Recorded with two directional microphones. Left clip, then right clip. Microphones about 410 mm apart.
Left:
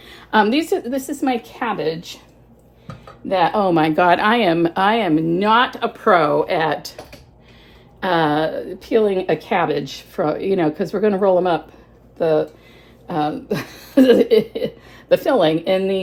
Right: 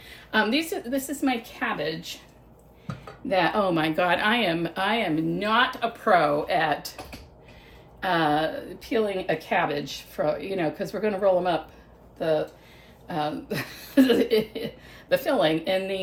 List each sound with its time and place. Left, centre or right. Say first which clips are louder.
0.0 s speech: left 8 dB; centre
8.0 s speech: left 6 dB; centre